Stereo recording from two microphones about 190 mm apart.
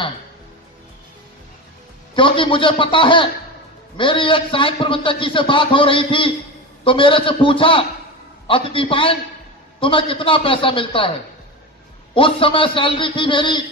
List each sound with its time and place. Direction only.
2.1 s a man's voice: 25° left (ahead or behind)
12.1 s a man's voice: 25° left (ahead or behind)